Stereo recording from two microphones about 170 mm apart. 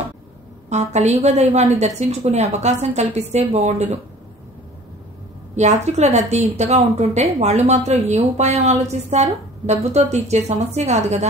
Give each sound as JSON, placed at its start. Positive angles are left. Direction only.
{"t": 0.7, "sound": "a woman's voice", "side_deg": -40}
{"t": 5.6, "sound": "a woman's voice", "side_deg": -40}